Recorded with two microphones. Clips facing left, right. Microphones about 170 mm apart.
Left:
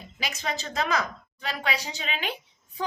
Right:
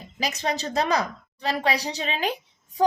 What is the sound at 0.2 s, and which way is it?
A woman's voice, 35° right (ahead or behind).